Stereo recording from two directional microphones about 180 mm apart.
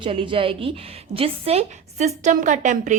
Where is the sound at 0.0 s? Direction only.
30° right (ahead or behind).